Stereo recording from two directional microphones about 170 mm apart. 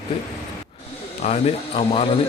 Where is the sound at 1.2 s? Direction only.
35° left (ahead or behind).